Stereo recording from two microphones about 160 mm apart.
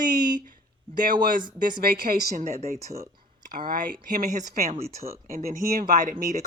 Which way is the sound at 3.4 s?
60° right (ahead or behind).